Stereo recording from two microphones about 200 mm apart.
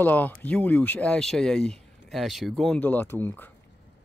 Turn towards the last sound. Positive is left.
turn(degrees=10)  # may be behind; listen again after turning